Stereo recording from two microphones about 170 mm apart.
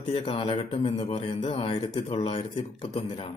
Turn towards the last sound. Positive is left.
turn(degrees=35)  # may be behind; listen again after turning